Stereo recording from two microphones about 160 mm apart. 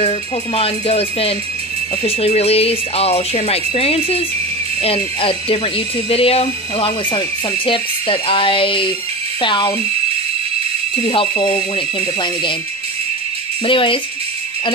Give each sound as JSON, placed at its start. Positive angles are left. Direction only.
{"t": 0.6, "sound": "speech", "side_deg": 35}
{"t": 11.0, "sound": "speech", "side_deg": 35}
{"t": 13.7, "sound": "speech", "side_deg": 35}